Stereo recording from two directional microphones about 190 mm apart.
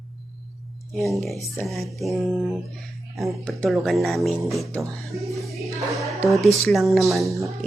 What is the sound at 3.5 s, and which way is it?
Music, 5° left (ahead or behind).